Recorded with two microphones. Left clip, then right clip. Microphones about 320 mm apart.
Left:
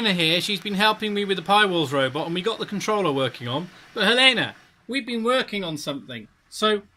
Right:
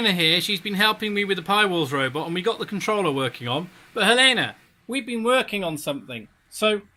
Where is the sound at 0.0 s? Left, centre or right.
Centre.